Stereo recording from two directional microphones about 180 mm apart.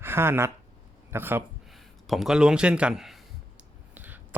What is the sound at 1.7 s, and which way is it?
Speech, centre (ahead or behind).